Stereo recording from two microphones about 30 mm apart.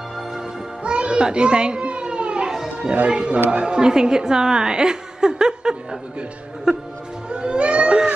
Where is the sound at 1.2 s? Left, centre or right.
Right.